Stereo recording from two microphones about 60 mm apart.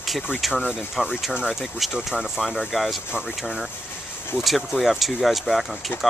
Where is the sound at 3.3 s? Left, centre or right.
Centre.